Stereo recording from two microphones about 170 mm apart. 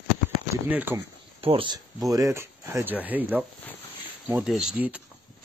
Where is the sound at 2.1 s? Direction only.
20° right (ahead or behind).